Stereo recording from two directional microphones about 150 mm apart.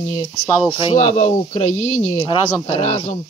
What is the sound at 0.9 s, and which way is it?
Speech, 55° left (ahead or behind).